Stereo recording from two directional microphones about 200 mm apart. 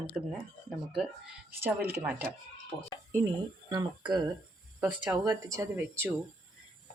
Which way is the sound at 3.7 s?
20° right (ahead or behind).